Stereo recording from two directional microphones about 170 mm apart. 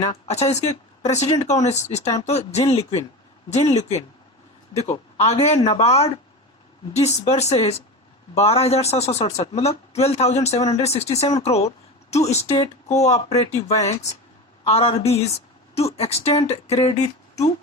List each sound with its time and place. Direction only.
0.0 s speech: 35° left (ahead or behind)